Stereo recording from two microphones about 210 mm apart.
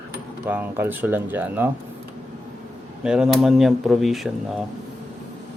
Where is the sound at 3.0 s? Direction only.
5° right (ahead or behind).